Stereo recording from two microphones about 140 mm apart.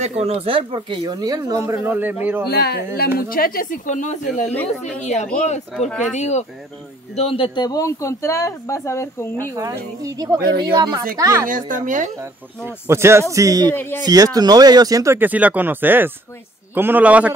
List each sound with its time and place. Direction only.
0.0 s speech: 50° right (ahead or behind); by 2.1 s 15° right (ahead or behind)
3.2 s speech: 90° left; by 5.3 s 55° left (ahead or behind)
5.8 s speech: 5° left (ahead or behind)
6.1 s speech: 55° left (ahead or behind)
7.2 s a man's voice: 40° left (ahead or behind)
7.6 s speech: 25° left (ahead or behind)
9.4 s speech: 25° right (ahead or behind)
11.4 s speech: 70° right (ahead or behind)
12.2 s speech: 15° right (ahead or behind)
13.7 s speech: 15° left (ahead or behind)
14.0 s speech: 25° right (ahead or behind)
15.1 s speech: 10° right (ahead or behind)